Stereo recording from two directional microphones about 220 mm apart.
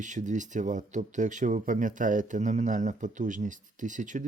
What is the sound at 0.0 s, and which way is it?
Speech, 35° right (ahead or behind).